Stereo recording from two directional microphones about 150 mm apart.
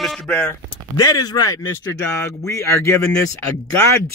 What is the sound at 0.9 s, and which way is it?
Speech, 25° left (ahead or behind).